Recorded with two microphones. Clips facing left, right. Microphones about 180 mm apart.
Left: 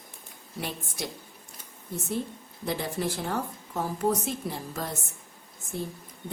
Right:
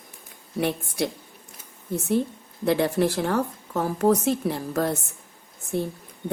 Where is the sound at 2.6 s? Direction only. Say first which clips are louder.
Right 9 dB; 70° right (ahead or behind).